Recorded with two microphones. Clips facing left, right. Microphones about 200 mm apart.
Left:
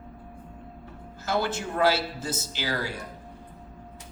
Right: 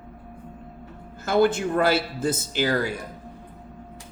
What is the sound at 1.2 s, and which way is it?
A man's voice, 55° right (ahead or behind).